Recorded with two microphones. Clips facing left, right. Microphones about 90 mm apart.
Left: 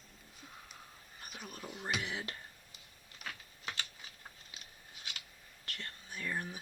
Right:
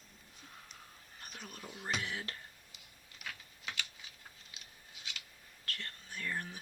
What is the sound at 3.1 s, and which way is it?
Typing, 40° left (ahead or behind).